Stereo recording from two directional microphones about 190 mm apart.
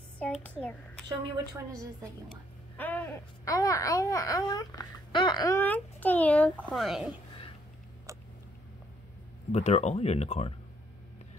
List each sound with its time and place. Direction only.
0.2 s speech: 5° left (ahead or behind)
2.8 s speech: 10° left (ahead or behind)
9.5 s speech: 35° left (ahead or behind)